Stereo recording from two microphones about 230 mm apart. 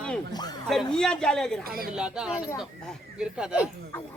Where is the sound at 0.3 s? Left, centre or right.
Centre.